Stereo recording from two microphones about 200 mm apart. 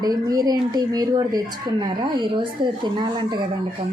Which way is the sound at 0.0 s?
20° right (ahead or behind).